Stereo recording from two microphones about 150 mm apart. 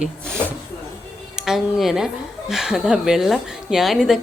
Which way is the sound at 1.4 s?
5° right (ahead or behind).